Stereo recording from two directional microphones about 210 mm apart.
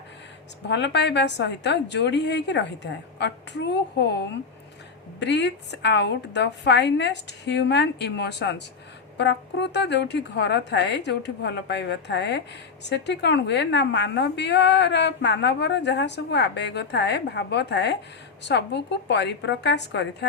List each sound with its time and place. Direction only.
0.7 s a woman's voice: 55° left (ahead or behind)